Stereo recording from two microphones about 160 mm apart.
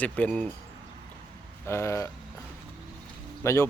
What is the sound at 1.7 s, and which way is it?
Speech, 15° left (ahead or behind).